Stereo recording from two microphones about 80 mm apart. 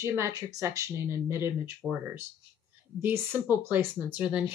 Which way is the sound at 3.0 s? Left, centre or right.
Right.